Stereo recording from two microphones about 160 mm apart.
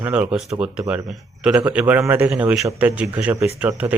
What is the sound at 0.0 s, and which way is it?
A man's voice, 10° right (ahead or behind).